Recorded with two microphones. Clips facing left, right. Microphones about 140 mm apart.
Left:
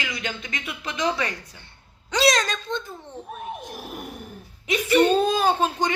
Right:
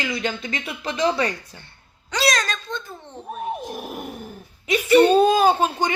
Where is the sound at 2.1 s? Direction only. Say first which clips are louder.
Left 2 dB; 20° left (ahead or behind).